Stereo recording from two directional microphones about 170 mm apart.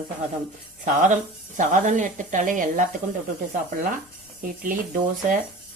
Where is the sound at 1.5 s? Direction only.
45° right (ahead or behind).